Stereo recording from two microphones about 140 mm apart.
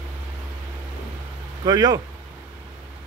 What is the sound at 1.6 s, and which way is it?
Speech, 25° right (ahead or behind).